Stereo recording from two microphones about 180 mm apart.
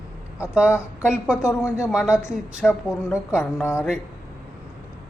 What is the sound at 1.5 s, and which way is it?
Speech, 15° left (ahead or behind).